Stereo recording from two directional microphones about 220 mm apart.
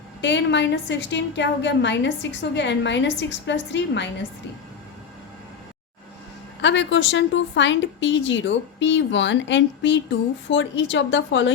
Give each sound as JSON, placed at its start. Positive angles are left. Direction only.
{"t": 0.2, "sound": "a woman's voice", "side_deg": 55}
{"t": 6.6, "sound": "a woman's voice", "side_deg": 55}